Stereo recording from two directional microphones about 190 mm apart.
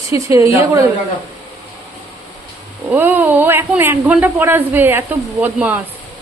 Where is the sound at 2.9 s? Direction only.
10° right (ahead or behind).